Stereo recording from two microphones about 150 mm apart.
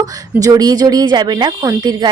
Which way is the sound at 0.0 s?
25° right (ahead or behind).